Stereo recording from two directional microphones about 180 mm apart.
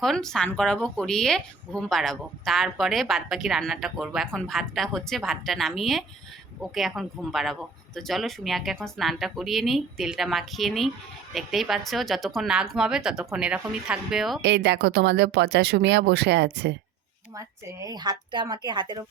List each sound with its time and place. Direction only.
0.0 s speech: centre (ahead or behind)
14.4 s speech: 70° right (ahead or behind)
17.3 s a woman's voice: 20° right (ahead or behind)